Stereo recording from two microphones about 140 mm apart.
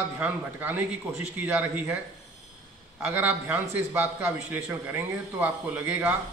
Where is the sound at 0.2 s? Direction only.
10° right (ahead or behind).